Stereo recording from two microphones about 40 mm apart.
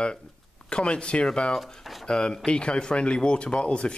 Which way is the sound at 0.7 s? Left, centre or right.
Left.